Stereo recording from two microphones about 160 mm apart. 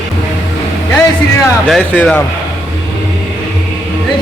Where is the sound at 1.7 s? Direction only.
10° left (ahead or behind).